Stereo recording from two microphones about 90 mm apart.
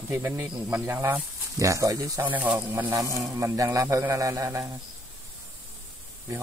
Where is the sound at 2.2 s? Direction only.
20° right (ahead or behind).